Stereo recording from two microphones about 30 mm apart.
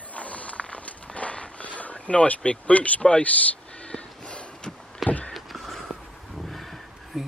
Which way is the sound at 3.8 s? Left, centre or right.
Left.